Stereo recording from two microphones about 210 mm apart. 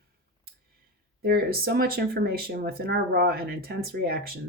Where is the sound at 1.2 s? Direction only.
45° right (ahead or behind).